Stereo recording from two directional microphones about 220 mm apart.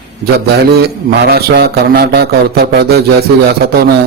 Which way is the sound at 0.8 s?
45° right (ahead or behind).